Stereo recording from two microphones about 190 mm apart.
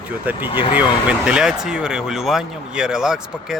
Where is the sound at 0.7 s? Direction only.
5° right (ahead or behind).